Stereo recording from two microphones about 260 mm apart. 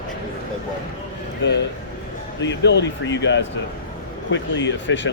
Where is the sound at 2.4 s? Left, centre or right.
Left.